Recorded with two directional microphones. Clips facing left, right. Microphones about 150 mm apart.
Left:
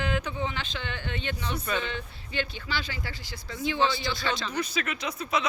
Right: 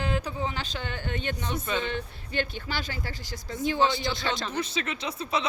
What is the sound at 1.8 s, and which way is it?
Speech, 50° right (ahead or behind).